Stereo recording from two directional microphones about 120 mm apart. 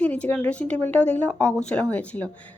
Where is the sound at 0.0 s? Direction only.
10° left (ahead or behind).